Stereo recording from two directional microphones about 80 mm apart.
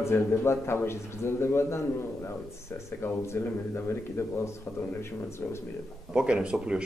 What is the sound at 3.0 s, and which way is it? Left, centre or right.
Speech, left.